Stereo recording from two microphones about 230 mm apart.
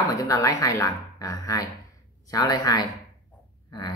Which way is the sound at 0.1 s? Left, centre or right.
Centre.